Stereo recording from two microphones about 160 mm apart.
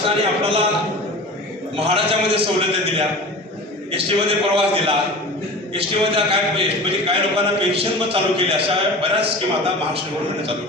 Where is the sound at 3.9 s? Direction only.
35° right (ahead or behind).